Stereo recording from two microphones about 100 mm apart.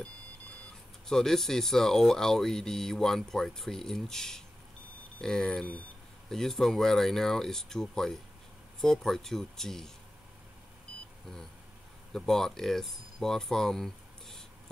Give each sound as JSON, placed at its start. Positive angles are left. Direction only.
{"t": 1.0, "sound": "speech", "side_deg": 5}
{"t": 12.1, "sound": "speech", "side_deg": 5}